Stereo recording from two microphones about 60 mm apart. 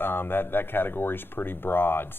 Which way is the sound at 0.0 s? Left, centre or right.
Left.